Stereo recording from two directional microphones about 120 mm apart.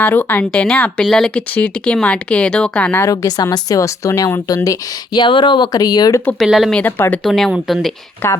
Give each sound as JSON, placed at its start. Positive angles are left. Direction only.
{"t": 0.0, "sound": "speech", "side_deg": 15}
{"t": 3.0, "sound": "speech", "side_deg": 30}
{"t": 5.2, "sound": "speech", "side_deg": 40}
{"t": 6.4, "sound": "speech", "side_deg": 0}
{"t": 8.2, "sound": "speech", "side_deg": 15}